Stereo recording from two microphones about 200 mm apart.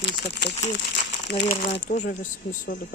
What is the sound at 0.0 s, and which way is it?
Speech, 60° left (ahead or behind).